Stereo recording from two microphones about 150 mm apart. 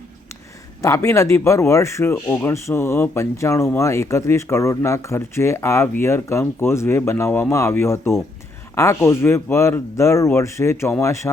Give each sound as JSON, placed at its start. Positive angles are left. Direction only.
{"t": 0.8, "sound": "speech", "side_deg": 20}